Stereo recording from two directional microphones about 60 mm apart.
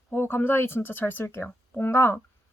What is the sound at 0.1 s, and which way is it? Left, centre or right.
Speech, left.